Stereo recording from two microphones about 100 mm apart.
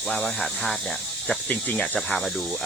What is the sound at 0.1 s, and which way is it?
Speech, 10° left (ahead or behind).